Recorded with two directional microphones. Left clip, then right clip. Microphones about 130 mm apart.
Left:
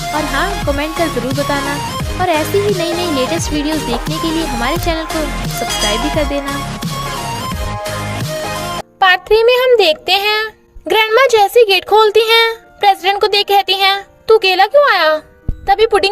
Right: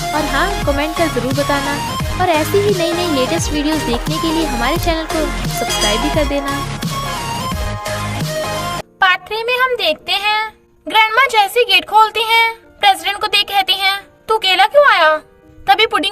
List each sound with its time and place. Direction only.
0.0 s speech: centre (ahead or behind)
5.5 s music: centre (ahead or behind)
9.0 s speech: 35° left (ahead or behind)
10.9 s speech: 50° left (ahead or behind)